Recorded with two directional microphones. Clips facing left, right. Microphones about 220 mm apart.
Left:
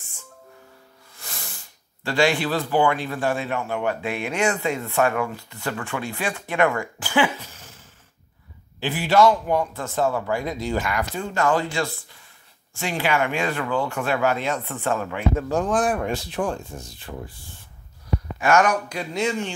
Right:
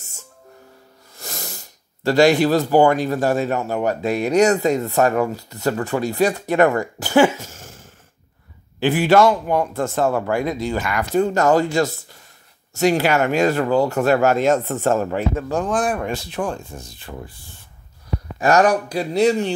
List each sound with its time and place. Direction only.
1.1 s a man's voice: 40° right (ahead or behind); by 11.1 s 75° right (ahead or behind)
11.1 s speech: 40° right (ahead or behind)
16.4 s a man's voice: 50° right (ahead or behind)
18.4 s speech: 35° right (ahead or behind)